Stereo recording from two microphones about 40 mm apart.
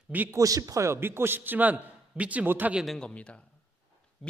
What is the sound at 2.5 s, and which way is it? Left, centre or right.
Speech, right.